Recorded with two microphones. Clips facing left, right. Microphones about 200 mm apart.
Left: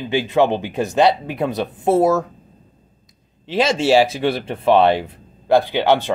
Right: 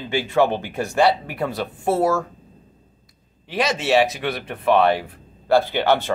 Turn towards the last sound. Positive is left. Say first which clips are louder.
# left 2 dB
turn(degrees=15)  # may be behind; listen again after turning